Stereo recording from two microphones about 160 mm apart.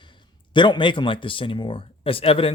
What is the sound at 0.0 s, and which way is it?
Speech, 30° left (ahead or behind).